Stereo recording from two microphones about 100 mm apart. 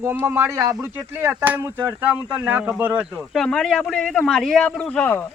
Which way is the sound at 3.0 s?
5° left (ahead or behind).